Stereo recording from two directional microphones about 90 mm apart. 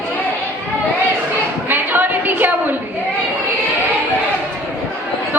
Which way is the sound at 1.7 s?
20° right (ahead or behind).